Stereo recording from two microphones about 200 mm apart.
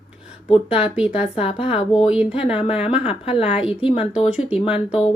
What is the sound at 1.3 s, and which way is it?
Speech, 30° left (ahead or behind).